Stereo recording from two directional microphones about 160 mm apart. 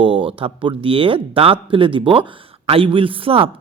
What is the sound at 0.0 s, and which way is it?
Speech, 35° right (ahead or behind).